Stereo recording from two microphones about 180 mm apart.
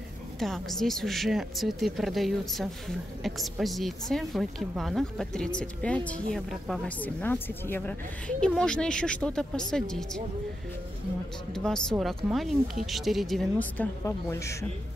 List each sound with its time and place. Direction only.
0.4 s speech: centre (ahead or behind)
11.5 s speech: 5° left (ahead or behind)